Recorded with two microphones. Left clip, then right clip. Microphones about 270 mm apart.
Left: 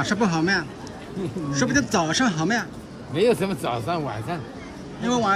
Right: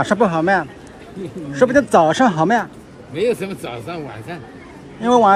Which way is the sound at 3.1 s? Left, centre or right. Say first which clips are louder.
Right 1 dB; left.